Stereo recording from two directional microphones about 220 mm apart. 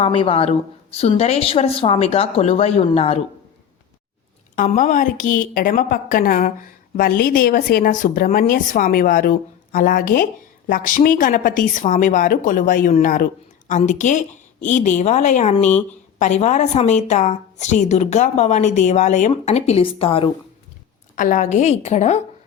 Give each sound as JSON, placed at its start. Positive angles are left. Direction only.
{"t": 0.0, "sound": "speech", "side_deg": 25}
{"t": 4.5, "sound": "a woman's voice", "side_deg": 35}
{"t": 21.2, "sound": "a woman's voice", "side_deg": 35}